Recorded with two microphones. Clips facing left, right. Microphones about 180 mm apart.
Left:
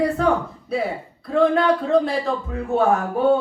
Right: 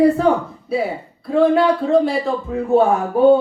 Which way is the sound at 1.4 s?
Centre (ahead or behind).